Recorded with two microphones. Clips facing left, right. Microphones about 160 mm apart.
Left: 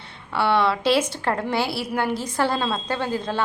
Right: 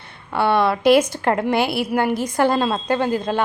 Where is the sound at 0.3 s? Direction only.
15° right (ahead or behind).